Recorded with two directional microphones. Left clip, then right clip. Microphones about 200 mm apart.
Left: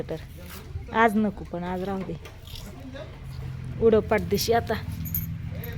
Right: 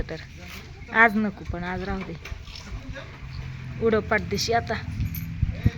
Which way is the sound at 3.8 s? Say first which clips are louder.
Left 2 dB; 15° left (ahead or behind).